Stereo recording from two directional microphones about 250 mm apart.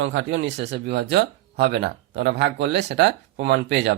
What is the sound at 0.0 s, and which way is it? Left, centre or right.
Speech, right.